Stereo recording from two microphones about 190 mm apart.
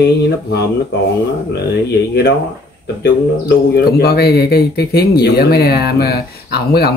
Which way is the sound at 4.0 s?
55° left (ahead or behind).